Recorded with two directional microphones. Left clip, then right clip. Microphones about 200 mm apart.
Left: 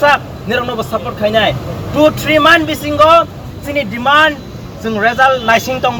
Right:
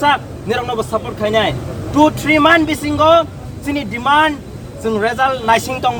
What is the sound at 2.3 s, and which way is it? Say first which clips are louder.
Speech: left 3 dB; 40° right (ahead or behind).